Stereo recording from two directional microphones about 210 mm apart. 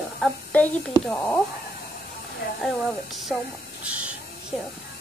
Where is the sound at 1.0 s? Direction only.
5° left (ahead or behind).